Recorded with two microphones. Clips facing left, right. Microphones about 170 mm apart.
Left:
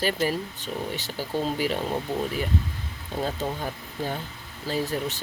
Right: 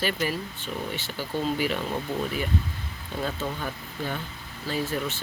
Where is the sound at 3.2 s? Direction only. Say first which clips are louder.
Left 2 dB; 40° left (ahead or behind).